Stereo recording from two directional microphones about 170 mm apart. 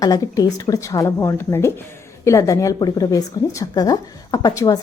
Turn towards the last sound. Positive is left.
turn(degrees=20)  # may be behind; listen again after turning